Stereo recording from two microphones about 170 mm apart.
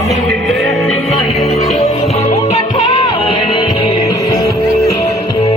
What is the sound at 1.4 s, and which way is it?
Music, 40° left (ahead or behind).